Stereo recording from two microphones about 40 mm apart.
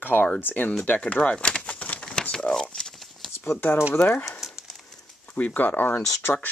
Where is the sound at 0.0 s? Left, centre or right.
Left.